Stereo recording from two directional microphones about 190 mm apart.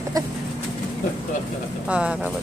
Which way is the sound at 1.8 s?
5° right (ahead or behind).